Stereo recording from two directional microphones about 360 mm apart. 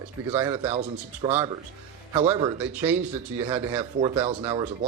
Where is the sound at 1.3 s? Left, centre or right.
Centre.